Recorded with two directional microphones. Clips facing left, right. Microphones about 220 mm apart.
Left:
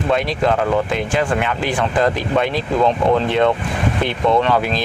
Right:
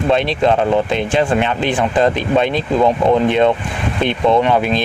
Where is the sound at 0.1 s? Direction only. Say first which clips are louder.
Right 3 dB; 25° right (ahead or behind).